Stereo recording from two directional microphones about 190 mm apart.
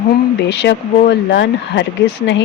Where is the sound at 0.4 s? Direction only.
65° left (ahead or behind).